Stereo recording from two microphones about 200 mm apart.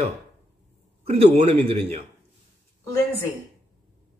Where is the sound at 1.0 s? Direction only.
30° right (ahead or behind).